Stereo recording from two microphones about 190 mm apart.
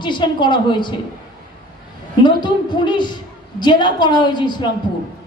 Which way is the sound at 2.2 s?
25° left (ahead or behind).